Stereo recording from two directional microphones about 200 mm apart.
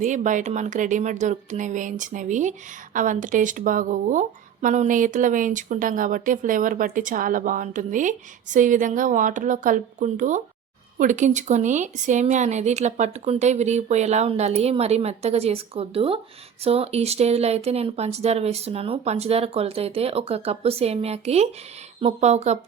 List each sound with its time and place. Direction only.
0.0 s speech: 40° right (ahead or behind)